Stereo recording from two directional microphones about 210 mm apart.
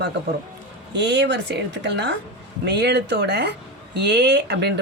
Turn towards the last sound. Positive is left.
turn(degrees=-55)  # may be behind; listen again after turning